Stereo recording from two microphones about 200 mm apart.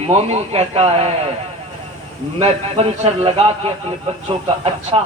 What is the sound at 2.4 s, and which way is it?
Speech, 30° right (ahead or behind).